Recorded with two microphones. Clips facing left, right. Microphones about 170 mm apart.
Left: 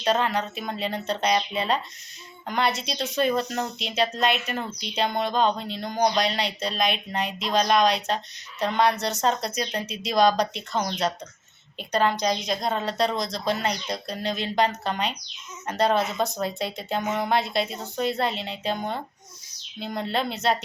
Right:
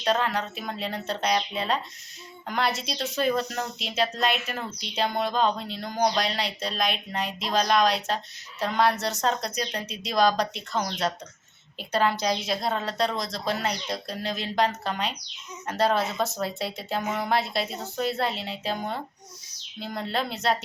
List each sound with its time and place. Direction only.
0.0 s speech: centre (ahead or behind)